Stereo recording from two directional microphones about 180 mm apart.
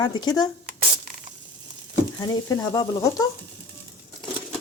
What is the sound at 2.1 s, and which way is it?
Speech, 20° left (ahead or behind).